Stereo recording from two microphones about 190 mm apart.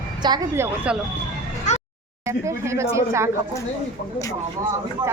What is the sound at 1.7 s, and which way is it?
Music, 40° left (ahead or behind).